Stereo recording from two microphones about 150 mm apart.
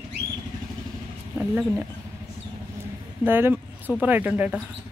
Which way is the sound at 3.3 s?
15° right (ahead or behind).